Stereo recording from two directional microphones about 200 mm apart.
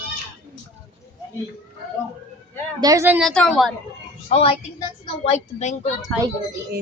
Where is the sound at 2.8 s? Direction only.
15° right (ahead or behind).